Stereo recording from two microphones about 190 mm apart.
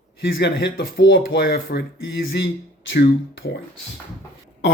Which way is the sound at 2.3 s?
65° left (ahead or behind).